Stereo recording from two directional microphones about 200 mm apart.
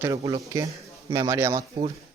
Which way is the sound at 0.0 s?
15° right (ahead or behind).